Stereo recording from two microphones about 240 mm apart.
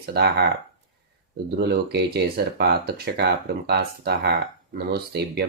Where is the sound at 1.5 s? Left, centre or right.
Right.